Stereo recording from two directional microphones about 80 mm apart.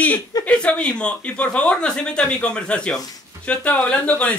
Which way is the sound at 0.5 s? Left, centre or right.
Centre.